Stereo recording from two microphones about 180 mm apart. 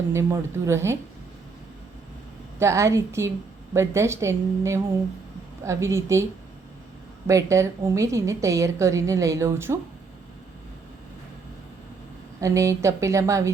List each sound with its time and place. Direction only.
0.1 s a woman's voice: 15° right (ahead or behind)
2.6 s a woman's voice: 15° right (ahead or behind)
7.3 s a woman's voice: 15° right (ahead or behind)
12.4 s a woman's voice: 15° right (ahead or behind)